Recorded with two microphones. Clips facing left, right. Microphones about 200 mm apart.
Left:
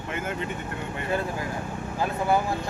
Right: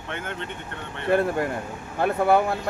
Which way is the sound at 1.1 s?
65° right (ahead or behind).